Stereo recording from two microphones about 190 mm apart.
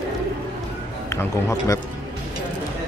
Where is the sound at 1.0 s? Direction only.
15° left (ahead or behind).